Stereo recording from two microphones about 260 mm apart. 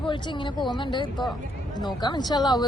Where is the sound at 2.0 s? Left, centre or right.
Centre.